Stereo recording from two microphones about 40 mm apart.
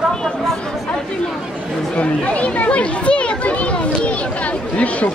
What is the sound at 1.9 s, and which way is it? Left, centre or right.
Children playing, left.